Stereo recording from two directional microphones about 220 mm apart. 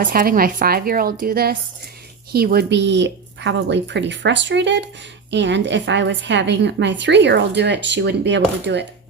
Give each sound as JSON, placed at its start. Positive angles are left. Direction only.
{"t": 0.0, "sound": "a woman's voice", "side_deg": -40}